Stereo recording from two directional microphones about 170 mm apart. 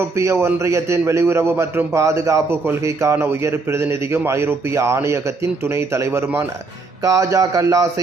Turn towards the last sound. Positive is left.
turn(degrees=-20)  # may be behind; listen again after turning